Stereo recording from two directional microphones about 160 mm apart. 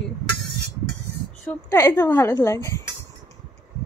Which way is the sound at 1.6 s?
20° left (ahead or behind).